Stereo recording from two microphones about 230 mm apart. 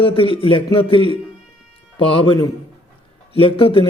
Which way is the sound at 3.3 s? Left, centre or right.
Left.